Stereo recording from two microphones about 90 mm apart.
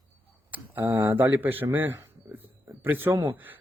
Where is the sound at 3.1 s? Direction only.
55° right (ahead or behind).